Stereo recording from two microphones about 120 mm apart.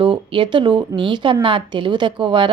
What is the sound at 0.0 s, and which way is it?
A woman's voice, 45° right (ahead or behind).